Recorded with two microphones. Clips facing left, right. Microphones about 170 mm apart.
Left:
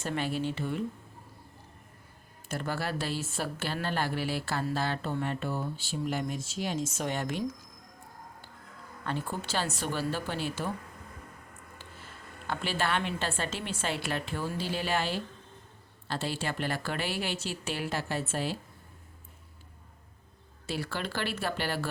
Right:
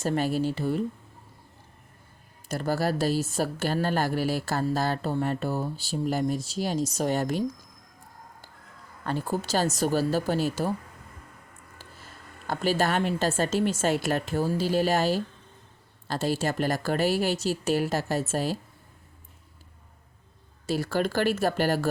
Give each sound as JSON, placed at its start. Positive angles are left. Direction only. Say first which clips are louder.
{"t": 0.0, "sound": "speech", "louder": "right 6 dB", "side_deg": -40}
{"t": 2.5, "sound": "speech", "louder": "right 7 dB", "side_deg": -40}
{"t": 9.0, "sound": "speech", "louder": "right 6 dB", "side_deg": -40}
{"t": 11.8, "sound": "speech", "louder": "right 2 dB", "side_deg": -40}
{"t": 20.7, "sound": "speech", "louder": "right 8 dB", "side_deg": -40}